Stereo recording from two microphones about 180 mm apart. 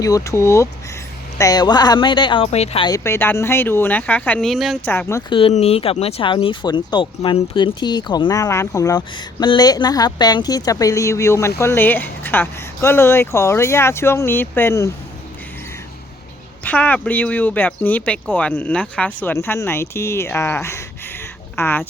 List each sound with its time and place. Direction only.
0.0 s speech: 20° left (ahead or behind); by 2.8 s 35° left (ahead or behind)
2.8 s speech: 15° left (ahead or behind); by 4.9 s centre (ahead or behind)
4.9 s speech: 15° left (ahead or behind)
5.3 s speech: 30° left (ahead or behind); by 14.8 s 15° left (ahead or behind)
16.6 s speech: 10° left (ahead or behind)